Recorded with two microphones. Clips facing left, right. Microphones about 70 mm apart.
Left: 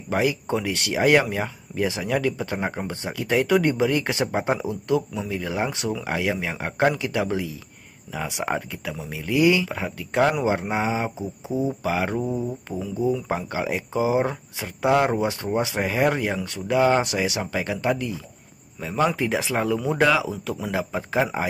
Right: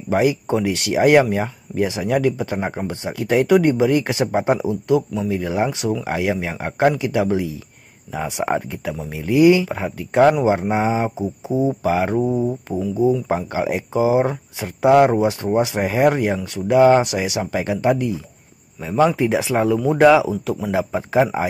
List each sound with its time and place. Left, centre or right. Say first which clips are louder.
0.1 s speech: right 5 dB; centre
2.9 s speech: right 6 dB; right
12.7 s speech: right 6 dB; right
13.1 s speech: right 5 dB; right
18.8 s speech: right 6 dB; centre